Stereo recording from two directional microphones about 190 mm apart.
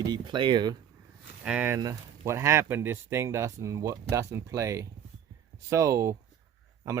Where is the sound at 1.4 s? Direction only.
10° right (ahead or behind).